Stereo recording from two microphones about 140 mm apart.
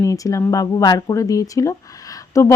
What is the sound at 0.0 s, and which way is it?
Speech, 25° left (ahead or behind).